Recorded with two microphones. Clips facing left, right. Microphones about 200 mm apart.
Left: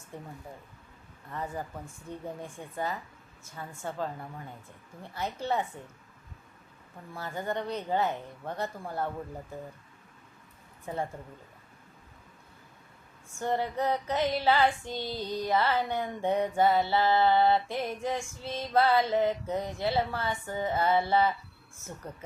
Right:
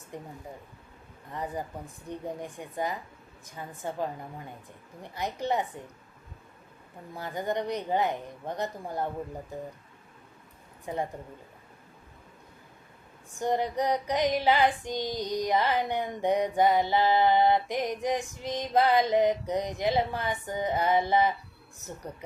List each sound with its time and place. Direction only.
0.1 s female singing: 15° right (ahead or behind)
1.3 s female singing: 15° right (ahead or behind)
5.1 s female singing: 15° right (ahead or behind)
7.1 s female singing: 15° right (ahead or behind)
10.8 s female singing: 15° right (ahead or behind)
13.3 s female singing: 15° right (ahead or behind)